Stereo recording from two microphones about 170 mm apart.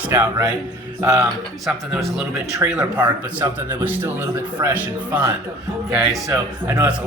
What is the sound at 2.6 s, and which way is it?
Speech, 15° right (ahead or behind).